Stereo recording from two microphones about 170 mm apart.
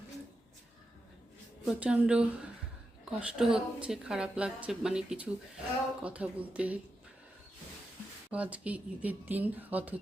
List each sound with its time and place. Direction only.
1.6 s a woman's voice: 5° right (ahead or behind)
8.3 s speech: 10° right (ahead or behind)